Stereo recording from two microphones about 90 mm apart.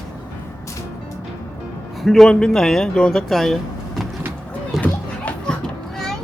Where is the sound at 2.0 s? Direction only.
5° left (ahead or behind).